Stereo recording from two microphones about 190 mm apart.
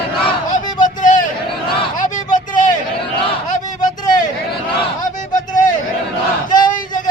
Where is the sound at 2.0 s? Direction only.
40° left (ahead or behind).